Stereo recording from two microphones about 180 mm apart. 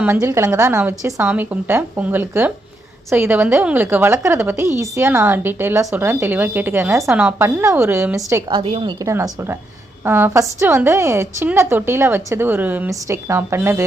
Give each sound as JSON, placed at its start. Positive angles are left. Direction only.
{"t": 0.0, "sound": "a woman's voice", "side_deg": -15}
{"t": 8.4, "sound": "a woman's voice", "side_deg": -30}